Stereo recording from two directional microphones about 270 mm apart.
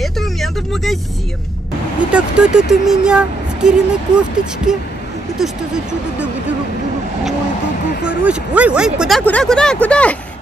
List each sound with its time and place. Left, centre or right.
0.0 s vehicle: centre
2.0 s speech: centre
8.2 s speech: centre